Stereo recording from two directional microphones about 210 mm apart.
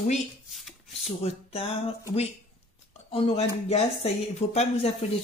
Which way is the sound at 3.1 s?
30° left (ahead or behind).